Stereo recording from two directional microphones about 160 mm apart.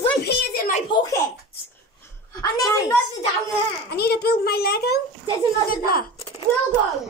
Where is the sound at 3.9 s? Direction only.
85° left.